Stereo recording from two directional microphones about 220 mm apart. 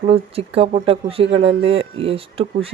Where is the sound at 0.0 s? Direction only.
25° right (ahead or behind).